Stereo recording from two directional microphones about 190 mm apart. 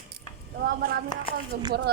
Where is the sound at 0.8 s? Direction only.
50° right (ahead or behind).